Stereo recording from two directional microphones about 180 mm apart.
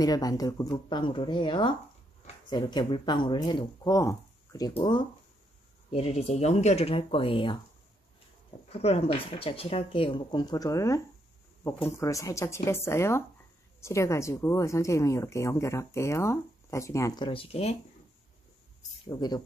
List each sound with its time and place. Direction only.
0.0 s speech: 20° left (ahead or behind)
5.9 s speech: 35° left (ahead or behind)
8.7 s speech: 35° left (ahead or behind); by 11.0 s 20° left (ahead or behind)
12.0 s speech: 20° left (ahead or behind); by 17.7 s 35° left (ahead or behind)
19.0 s speech: 25° left (ahead or behind)